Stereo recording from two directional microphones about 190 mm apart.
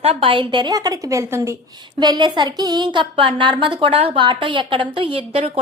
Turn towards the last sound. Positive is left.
turn(degrees=-30)  # may be behind; listen again after turning